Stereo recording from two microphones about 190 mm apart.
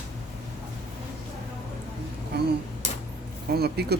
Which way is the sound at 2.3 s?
55° right (ahead or behind).